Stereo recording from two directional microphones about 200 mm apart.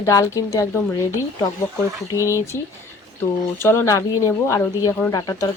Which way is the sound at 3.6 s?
10° left (ahead or behind).